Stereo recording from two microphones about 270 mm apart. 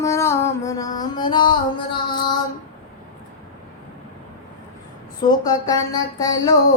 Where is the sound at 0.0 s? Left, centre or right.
Centre.